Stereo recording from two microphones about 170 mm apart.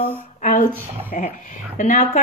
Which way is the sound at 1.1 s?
45° left (ahead or behind).